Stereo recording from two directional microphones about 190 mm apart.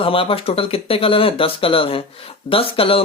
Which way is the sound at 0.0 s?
30° left (ahead or behind).